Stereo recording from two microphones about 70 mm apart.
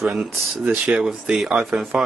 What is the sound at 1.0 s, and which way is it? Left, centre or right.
Speech, centre.